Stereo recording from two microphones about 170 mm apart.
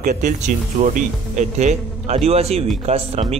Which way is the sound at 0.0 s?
50° right (ahead or behind).